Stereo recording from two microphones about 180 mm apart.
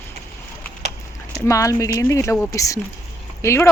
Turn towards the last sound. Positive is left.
turn(degrees=15)  # may be behind; listen again after turning